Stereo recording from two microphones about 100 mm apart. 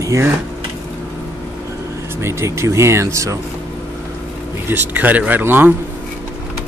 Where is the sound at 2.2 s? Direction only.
30° right (ahead or behind).